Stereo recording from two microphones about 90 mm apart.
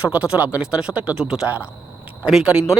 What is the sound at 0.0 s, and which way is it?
Speech, 15° right (ahead or behind).